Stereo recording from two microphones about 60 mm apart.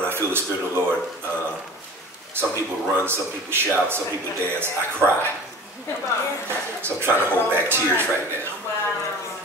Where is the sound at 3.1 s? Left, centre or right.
Right.